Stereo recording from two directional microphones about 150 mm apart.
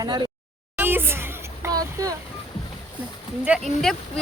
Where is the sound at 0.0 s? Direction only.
30° right (ahead or behind).